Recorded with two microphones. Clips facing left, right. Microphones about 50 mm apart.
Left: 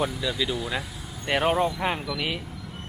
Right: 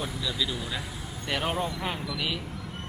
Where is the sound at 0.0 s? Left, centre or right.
Centre.